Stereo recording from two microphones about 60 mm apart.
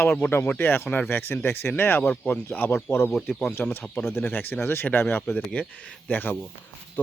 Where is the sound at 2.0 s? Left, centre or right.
Left.